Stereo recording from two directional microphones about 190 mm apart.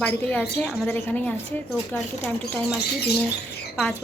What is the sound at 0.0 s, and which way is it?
A woman's voice, 10° left (ahead or behind).